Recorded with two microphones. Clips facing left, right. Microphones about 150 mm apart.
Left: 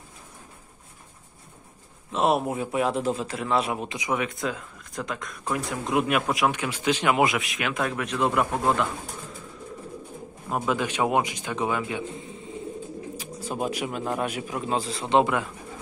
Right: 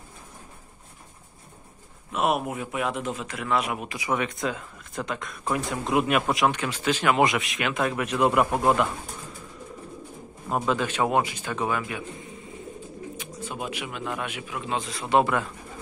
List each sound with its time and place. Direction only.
2.1 s a man's voice: 30° left (ahead or behind)
4.1 s speech: 5° left (ahead or behind)
6.5 s speech: 10° left (ahead or behind)
7.2 s speech: centre (ahead or behind)
10.5 s speech: 5° left (ahead or behind)
13.2 s a man's voice: 35° left (ahead or behind); by 15.4 s 20° left (ahead or behind)